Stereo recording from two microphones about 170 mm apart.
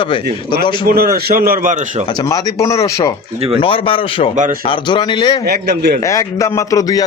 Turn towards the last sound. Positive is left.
turn(degrees=20)  # may be behind; listen again after turning